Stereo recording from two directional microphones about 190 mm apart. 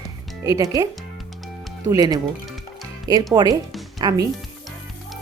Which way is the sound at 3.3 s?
20° right (ahead or behind).